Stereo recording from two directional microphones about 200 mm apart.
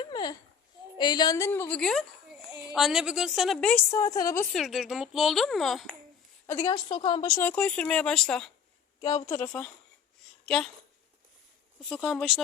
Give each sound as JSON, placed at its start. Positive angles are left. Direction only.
{"t": 0.0, "sound": "babbling", "side_deg": 25}
{"t": 0.9, "sound": "a woman's voice", "side_deg": 20}
{"t": 3.9, "sound": "a woman's voice", "side_deg": 15}
{"t": 4.5, "sound": "speech", "side_deg": 0}
{"t": 6.7, "sound": "a woman's voice", "side_deg": 25}
{"t": 9.2, "sound": "a woman's voice", "side_deg": 15}
{"t": 11.9, "sound": "speech", "side_deg": 0}